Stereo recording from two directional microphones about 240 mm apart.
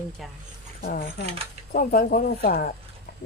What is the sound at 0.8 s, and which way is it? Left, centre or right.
A woman's voice, left.